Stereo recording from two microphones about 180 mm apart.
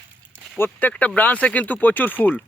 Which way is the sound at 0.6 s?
10° left (ahead or behind).